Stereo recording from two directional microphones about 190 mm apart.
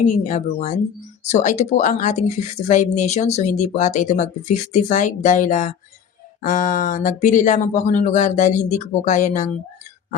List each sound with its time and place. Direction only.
0.0 s speech: 40° left (ahead or behind)